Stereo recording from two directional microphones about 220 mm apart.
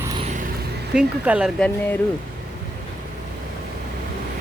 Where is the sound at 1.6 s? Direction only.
10° left (ahead or behind).